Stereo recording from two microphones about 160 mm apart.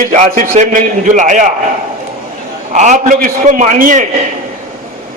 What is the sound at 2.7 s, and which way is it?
A man's voice, 50° right (ahead or behind).